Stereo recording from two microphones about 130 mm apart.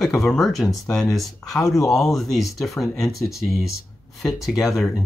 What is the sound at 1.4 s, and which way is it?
Speech, 25° left (ahead or behind).